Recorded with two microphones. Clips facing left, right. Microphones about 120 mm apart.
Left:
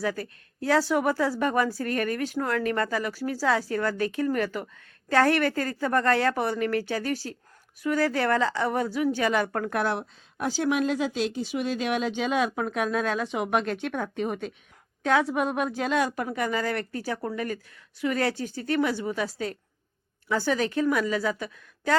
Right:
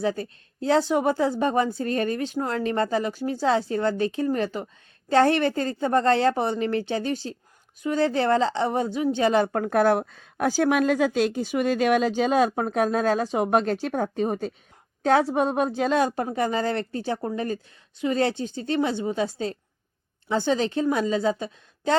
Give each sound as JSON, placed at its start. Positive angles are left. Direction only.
{"t": 0.0, "sound": "a woman's voice", "side_deg": -25}